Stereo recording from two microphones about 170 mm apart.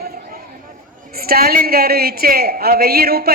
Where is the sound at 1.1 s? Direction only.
60° right (ahead or behind).